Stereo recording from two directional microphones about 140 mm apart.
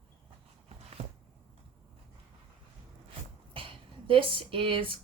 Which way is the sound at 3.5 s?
40° right (ahead or behind).